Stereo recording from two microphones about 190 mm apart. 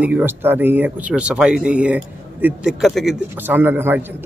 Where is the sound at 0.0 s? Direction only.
10° right (ahead or behind).